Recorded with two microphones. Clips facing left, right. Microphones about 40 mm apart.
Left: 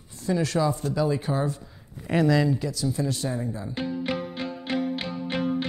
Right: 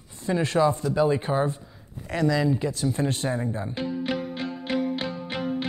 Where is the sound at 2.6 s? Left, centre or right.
Right.